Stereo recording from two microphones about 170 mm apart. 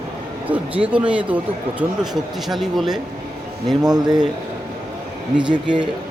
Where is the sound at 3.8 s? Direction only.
25° right (ahead or behind).